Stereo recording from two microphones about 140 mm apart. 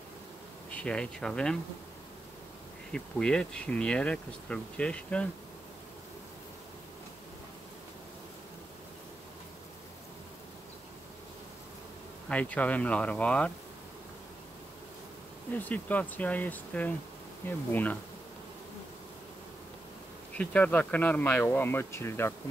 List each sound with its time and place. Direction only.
0.7 s speech: 10° left (ahead or behind)
2.9 s speech: 5° left (ahead or behind)
12.3 s speech: 10° left (ahead or behind)
15.5 s speech: 10° left (ahead or behind)
20.3 s speech: 10° left (ahead or behind)